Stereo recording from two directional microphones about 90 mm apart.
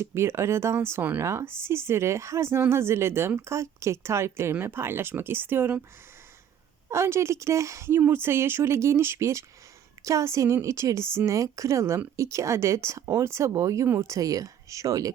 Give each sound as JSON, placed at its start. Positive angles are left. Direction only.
{"t": 0.0, "sound": "a woman's voice", "side_deg": -30}
{"t": 6.9, "sound": "a woman's voice", "side_deg": -30}